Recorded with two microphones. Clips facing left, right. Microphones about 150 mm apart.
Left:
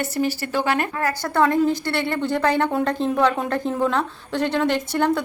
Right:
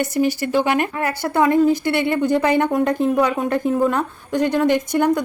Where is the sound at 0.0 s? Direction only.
15° right (ahead or behind).